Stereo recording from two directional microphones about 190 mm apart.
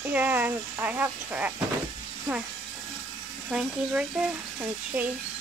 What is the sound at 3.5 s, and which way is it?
Speech, 5° right (ahead or behind).